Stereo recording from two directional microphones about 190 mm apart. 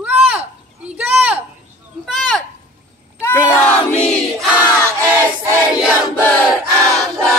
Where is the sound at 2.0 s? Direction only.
Centre (ahead or behind).